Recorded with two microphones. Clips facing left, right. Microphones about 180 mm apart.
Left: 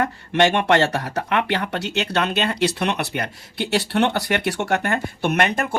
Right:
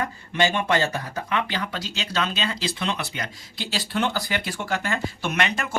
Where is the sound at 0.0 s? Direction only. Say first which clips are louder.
Left 5 dB; 70° left (ahead or behind).